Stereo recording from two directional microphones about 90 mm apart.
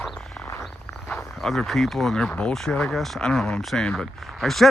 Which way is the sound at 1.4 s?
Centre (ahead or behind).